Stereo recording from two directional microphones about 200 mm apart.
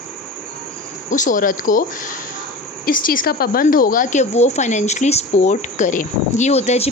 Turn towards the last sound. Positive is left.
turn(degrees=30)  # may be behind; listen again after turning